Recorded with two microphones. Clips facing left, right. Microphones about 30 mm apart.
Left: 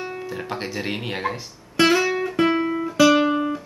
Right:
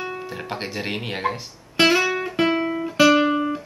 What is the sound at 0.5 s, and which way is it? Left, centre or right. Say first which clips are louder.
Speech: even; centre.